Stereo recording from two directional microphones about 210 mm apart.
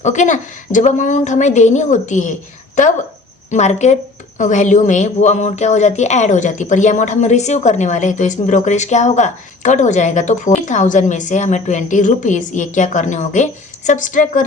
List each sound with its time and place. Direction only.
0.0 s a woman's voice: 35° left (ahead or behind)
3.5 s a woman's voice: 35° left (ahead or behind)